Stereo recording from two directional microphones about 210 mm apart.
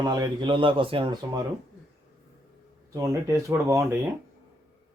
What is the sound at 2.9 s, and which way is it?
Speech, 15° right (ahead or behind).